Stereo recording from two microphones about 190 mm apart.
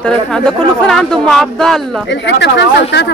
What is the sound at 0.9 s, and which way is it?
Speech, centre (ahead or behind).